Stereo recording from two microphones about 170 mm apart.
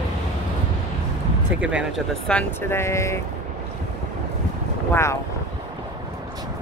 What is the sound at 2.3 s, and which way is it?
Speech, 10° left (ahead or behind).